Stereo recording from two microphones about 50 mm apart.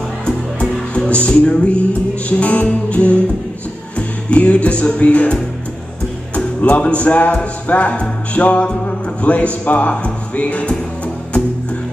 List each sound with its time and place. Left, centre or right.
0.2 s music: left
2.2 s speech: left
4.3 s speech: left
6.3 s music: left
7.6 s speech: left